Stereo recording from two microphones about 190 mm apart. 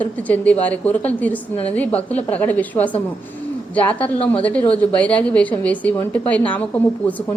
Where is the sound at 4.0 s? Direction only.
30° left (ahead or behind).